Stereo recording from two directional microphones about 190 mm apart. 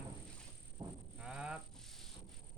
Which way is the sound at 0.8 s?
25° right (ahead or behind).